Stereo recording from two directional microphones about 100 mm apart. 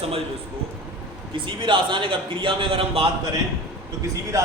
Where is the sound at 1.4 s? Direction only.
55° right (ahead or behind).